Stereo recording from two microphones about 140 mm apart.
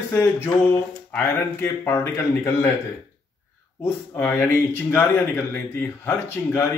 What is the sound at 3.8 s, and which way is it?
Speech, 15° left (ahead or behind).